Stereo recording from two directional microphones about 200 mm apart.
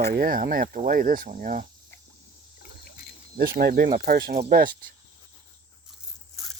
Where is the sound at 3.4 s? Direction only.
50° right (ahead or behind).